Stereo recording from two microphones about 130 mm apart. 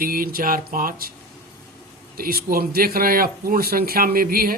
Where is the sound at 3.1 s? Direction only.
90° right.